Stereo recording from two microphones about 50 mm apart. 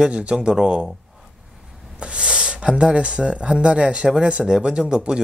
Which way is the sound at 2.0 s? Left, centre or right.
Centre.